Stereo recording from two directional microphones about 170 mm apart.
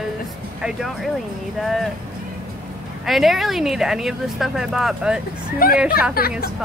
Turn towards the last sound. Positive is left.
turn(degrees=60)  # may be behind; listen again after turning